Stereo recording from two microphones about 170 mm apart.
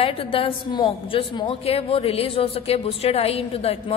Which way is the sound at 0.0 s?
35° left (ahead or behind).